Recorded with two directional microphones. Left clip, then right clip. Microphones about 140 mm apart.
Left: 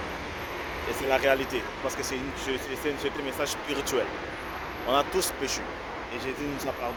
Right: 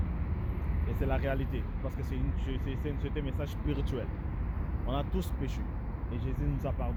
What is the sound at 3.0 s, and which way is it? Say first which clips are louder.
Speech: left 9 dB; 10° left (ahead or behind).